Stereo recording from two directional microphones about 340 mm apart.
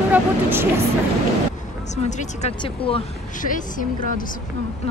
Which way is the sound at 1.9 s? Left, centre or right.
Left.